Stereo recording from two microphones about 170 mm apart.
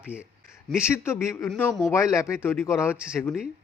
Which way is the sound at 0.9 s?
15° left (ahead or behind).